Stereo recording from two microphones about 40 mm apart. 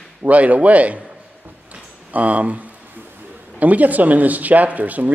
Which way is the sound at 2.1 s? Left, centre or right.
Right.